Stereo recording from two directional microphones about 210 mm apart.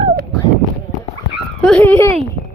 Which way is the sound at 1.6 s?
5° left (ahead or behind).